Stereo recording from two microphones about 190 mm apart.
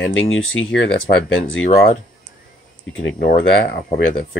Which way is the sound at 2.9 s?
80° left.